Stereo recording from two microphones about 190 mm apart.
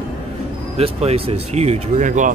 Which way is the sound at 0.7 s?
30° right (ahead or behind).